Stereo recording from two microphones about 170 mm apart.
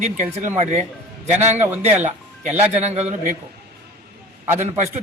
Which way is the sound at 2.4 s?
40° right (ahead or behind).